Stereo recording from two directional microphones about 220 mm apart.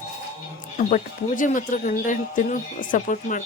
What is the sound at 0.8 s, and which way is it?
Speech, 35° left (ahead or behind).